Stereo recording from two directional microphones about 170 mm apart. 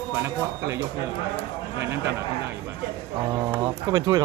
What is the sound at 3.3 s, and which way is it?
Speech, 20° right (ahead or behind).